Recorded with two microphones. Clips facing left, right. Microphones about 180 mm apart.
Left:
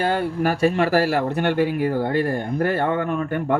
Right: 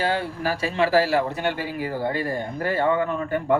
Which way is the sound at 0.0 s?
55° left (ahead or behind).